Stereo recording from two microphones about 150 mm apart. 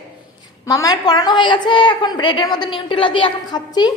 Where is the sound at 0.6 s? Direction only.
25° left (ahead or behind).